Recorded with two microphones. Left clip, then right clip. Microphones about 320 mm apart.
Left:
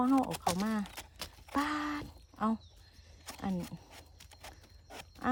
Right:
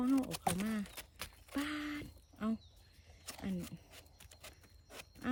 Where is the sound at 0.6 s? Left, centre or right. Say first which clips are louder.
Left 5 dB; centre.